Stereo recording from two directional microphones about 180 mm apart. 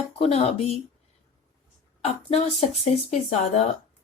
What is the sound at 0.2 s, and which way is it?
Speech, 35° left (ahead or behind).